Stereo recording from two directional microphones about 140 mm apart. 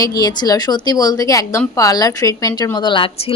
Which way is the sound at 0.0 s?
25° left (ahead or behind).